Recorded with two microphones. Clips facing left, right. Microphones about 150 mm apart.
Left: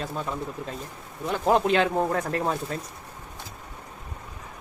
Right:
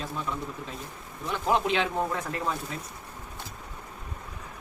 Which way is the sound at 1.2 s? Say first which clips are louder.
Left 4 dB; 40° left (ahead or behind).